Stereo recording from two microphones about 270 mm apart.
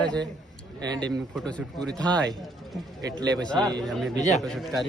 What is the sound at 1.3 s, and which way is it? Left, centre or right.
Speech, centre.